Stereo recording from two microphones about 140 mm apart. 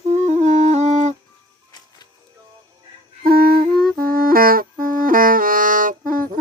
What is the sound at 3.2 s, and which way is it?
Music, 90° right.